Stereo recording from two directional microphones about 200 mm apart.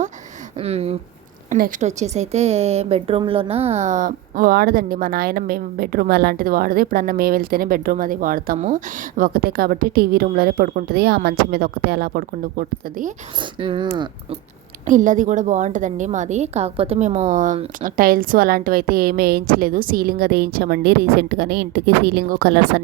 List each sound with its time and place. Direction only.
0.6 s speech: 30° right (ahead or behind)
1.5 s a woman's voice: 40° right (ahead or behind)
13.6 s speech: 25° right (ahead or behind)
14.8 s a woman's voice: 40° right (ahead or behind)